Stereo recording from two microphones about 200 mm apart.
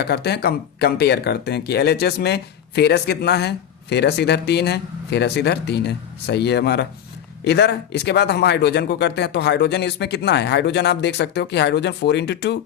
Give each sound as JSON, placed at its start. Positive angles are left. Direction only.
{"t": 0.0, "sound": "speech", "side_deg": 55}